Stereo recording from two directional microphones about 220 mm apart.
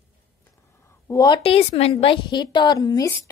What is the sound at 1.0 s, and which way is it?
A woman's voice, 15° left (ahead or behind).